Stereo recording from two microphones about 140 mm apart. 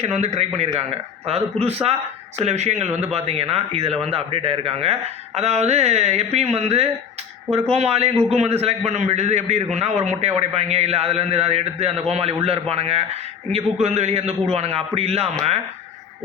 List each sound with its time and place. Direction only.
0.0 s a man's voice: 55° right (ahead or behind)